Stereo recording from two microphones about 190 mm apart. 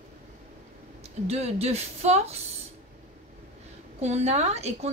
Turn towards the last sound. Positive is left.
turn(degrees=-35)  # may be behind; listen again after turning